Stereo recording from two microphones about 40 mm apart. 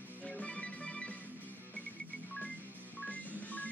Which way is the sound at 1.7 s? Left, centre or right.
Left.